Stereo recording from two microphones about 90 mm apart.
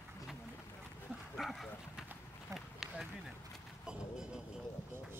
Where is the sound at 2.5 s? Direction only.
5° right (ahead or behind).